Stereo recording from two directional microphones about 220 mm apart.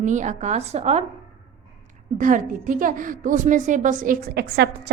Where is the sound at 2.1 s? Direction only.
35° right (ahead or behind).